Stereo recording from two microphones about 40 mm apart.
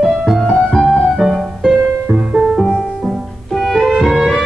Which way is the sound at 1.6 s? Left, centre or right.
Right.